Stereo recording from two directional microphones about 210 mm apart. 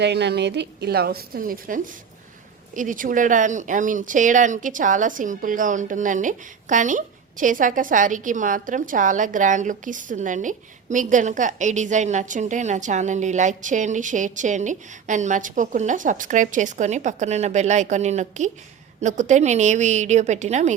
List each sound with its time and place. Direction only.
0.0 s a woman's voice: 55° right (ahead or behind); by 20.7 s 35° right (ahead or behind)